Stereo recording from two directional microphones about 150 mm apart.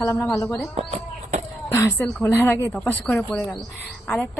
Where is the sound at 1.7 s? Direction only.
15° left (ahead or behind).